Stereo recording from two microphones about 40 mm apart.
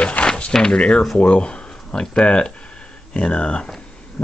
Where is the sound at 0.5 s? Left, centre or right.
Centre.